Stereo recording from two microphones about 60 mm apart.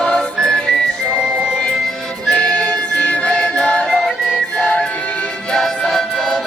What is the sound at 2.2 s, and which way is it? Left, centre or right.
Music, centre.